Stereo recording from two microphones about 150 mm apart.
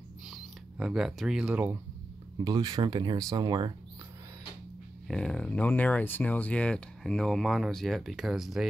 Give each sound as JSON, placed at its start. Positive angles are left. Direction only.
{"t": 0.3, "sound": "speech", "side_deg": -5}
{"t": 2.3, "sound": "speech", "side_deg": -30}
{"t": 5.0, "sound": "speech", "side_deg": 5}